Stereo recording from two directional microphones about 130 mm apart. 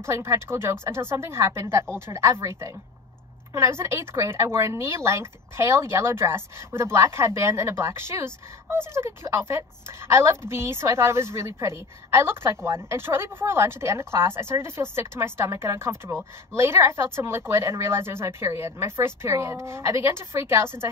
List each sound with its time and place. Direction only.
0.0 s speech: 20° right (ahead or behind)